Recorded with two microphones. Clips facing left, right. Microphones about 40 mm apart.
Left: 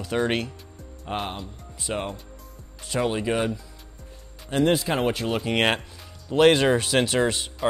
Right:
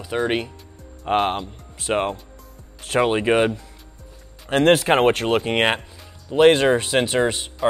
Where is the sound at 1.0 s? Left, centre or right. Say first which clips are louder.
Right 10 dB; right.